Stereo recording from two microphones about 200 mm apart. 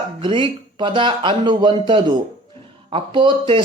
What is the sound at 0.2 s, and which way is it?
Speech, 25° right (ahead or behind).